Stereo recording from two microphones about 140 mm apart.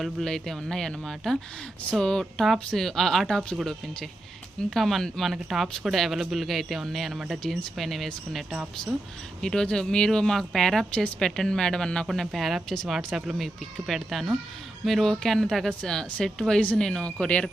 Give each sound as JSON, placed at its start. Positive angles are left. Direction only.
{"t": 0.0, "sound": "speech", "side_deg": 0}